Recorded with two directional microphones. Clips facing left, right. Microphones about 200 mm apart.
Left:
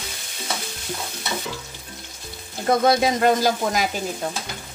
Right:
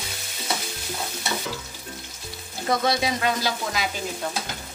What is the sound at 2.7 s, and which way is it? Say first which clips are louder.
Frying: left 5 dB; 50° left (ahead or behind).